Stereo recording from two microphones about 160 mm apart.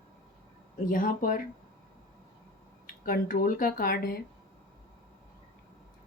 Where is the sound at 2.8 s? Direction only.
60° left (ahead or behind).